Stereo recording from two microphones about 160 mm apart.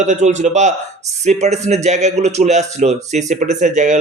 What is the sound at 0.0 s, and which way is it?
A man's voice, 45° right (ahead or behind).